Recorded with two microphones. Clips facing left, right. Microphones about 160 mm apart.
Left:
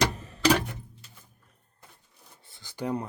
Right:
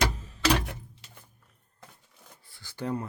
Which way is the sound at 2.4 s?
20° left (ahead or behind).